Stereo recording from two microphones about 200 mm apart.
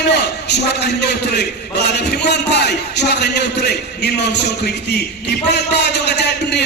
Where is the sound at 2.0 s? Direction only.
55° left (ahead or behind).